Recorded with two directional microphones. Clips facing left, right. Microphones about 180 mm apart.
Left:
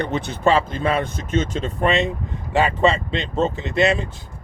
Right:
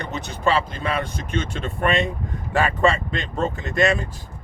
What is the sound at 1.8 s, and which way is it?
Speech, 30° left (ahead or behind).